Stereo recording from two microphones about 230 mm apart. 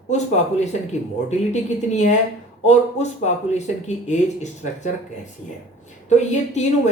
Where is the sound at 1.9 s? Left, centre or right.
Left.